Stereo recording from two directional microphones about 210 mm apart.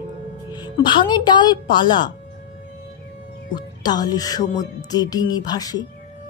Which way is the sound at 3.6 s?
20° left (ahead or behind).